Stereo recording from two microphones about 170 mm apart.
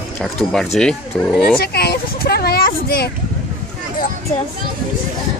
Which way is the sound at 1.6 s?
70° left (ahead or behind).